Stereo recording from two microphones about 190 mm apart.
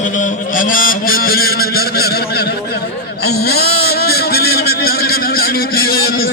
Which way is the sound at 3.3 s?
55° left (ahead or behind).